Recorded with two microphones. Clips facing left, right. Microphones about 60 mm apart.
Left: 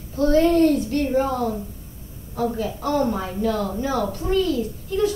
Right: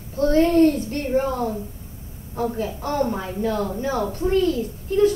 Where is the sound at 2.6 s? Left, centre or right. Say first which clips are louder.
Left 2 dB; right.